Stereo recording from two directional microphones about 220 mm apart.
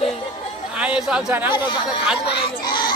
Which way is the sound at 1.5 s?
20° left (ahead or behind).